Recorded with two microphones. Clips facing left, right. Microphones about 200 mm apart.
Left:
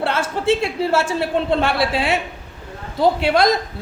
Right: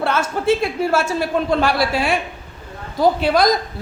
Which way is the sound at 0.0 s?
30° left (ahead or behind).